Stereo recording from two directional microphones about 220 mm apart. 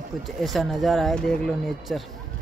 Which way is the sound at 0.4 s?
Centre (ahead or behind).